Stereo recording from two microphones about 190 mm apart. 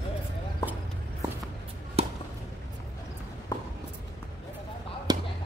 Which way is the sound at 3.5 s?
20° left (ahead or behind).